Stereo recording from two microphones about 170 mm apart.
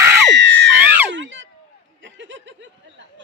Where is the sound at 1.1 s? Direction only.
90° right.